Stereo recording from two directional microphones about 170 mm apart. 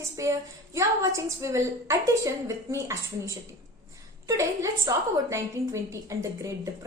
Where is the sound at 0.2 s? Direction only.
15° right (ahead or behind).